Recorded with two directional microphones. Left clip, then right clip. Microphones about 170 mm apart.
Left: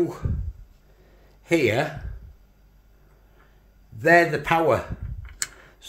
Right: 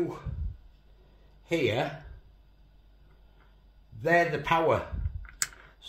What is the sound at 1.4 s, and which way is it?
Speech, 30° left (ahead or behind).